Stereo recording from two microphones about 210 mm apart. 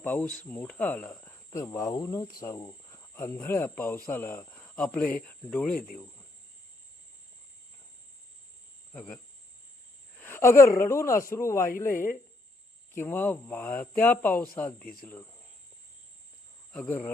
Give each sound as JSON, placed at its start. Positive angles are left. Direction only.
{"t": 0.0, "sound": "speech", "side_deg": 10}
{"t": 8.9, "sound": "speech", "side_deg": 5}
{"t": 16.7, "sound": "cricket", "side_deg": 5}